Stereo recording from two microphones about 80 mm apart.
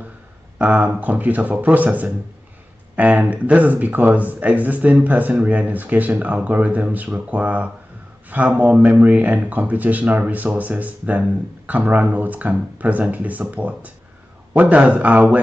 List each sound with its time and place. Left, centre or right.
0.6 s speech: centre